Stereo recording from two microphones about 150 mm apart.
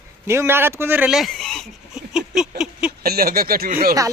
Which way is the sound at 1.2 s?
Centre (ahead or behind).